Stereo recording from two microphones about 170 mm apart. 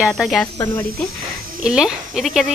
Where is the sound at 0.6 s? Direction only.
15° left (ahead or behind).